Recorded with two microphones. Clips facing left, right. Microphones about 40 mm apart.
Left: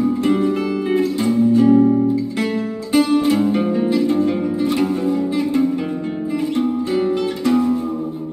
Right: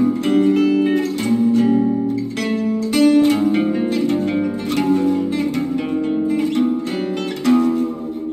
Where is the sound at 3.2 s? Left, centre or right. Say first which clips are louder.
Right 1 dB; right.